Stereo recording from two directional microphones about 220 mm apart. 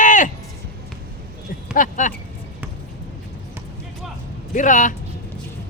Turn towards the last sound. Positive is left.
turn(degrees=35)  # may be behind; listen again after turning